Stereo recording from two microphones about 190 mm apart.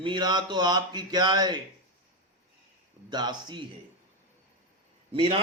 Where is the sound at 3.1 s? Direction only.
20° right (ahead or behind).